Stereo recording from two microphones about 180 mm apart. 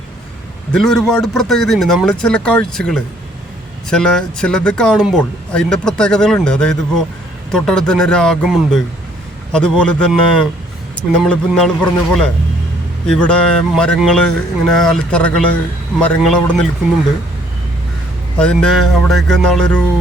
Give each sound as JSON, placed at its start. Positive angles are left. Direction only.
{"t": 0.7, "sound": "speech", "side_deg": 5}
{"t": 18.3, "sound": "speech", "side_deg": 5}